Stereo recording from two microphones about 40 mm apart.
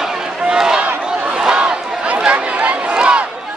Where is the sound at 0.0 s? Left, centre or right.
Centre.